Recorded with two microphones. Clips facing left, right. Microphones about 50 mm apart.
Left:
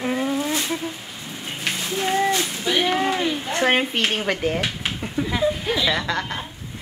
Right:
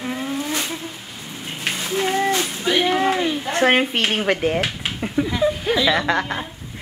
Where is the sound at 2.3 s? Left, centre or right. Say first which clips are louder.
Right 2 dB; right.